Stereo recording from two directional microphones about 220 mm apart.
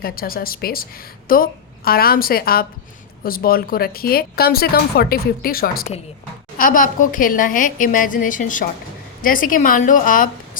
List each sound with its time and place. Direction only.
0.0 s a woman's voice: 40° left (ahead or behind)